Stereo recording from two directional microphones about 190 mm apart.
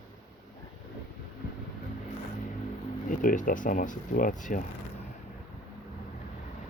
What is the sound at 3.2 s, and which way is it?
Speech, 45° left (ahead or behind).